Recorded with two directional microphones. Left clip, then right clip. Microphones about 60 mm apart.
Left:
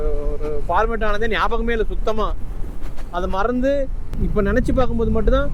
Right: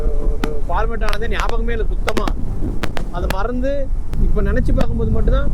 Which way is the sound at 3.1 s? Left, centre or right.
Left.